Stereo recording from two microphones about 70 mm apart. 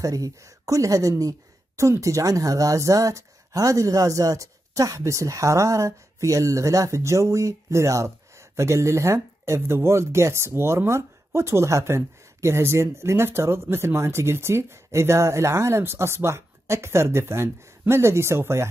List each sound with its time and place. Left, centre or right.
0.0 s speech: right